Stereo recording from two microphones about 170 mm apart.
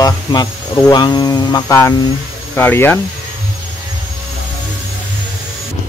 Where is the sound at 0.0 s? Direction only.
25° left (ahead or behind).